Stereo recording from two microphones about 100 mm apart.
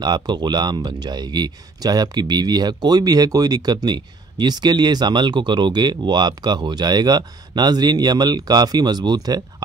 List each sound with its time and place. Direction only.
0.0 s speech: 45° right (ahead or behind)